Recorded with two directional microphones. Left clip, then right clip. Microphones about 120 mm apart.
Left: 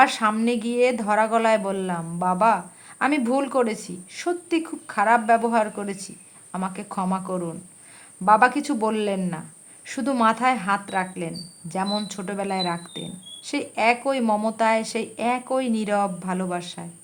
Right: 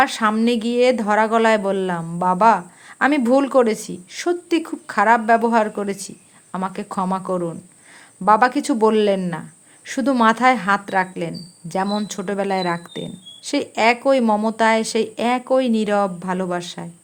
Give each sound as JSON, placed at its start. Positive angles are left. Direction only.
{"t": 0.0, "sound": "speech", "side_deg": -35}